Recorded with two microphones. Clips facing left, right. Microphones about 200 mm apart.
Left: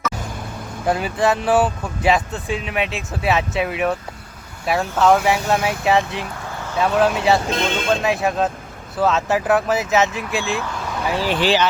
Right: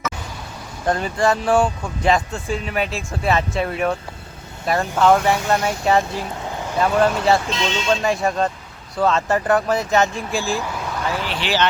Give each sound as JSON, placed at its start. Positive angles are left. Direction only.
{"t": 0.9, "sound": "speech", "side_deg": 5}
{"t": 6.5, "sound": "vehicle", "side_deg": -15}
{"t": 6.7, "sound": "speech", "side_deg": 0}
{"t": 7.5, "sound": "speech", "side_deg": 55}
{"t": 8.0, "sound": "speech", "side_deg": 0}
{"t": 11.3, "sound": "speech", "side_deg": 45}